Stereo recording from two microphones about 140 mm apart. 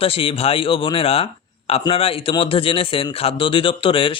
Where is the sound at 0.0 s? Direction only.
40° left (ahead or behind).